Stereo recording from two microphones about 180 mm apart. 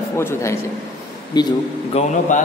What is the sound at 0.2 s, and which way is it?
A man's voice, 15° left (ahead or behind).